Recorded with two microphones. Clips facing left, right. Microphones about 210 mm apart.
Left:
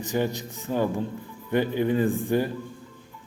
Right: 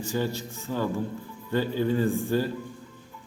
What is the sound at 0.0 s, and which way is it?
Speech, 20° left (ahead or behind).